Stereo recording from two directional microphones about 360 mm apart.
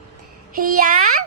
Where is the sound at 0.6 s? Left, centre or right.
Right.